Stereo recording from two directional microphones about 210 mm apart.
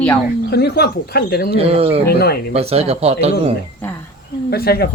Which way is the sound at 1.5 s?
30° right (ahead or behind).